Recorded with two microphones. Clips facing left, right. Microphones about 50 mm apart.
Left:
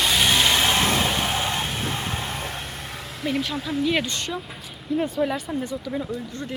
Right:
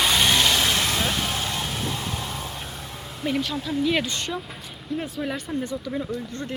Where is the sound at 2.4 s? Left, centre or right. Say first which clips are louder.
Left 2 dB; left.